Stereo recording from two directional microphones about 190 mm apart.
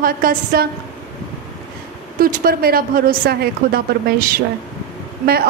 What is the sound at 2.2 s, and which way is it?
A woman's voice, 50° right (ahead or behind).